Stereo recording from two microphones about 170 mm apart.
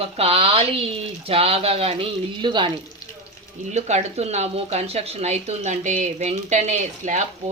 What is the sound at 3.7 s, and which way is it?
Speech, 40° right (ahead or behind).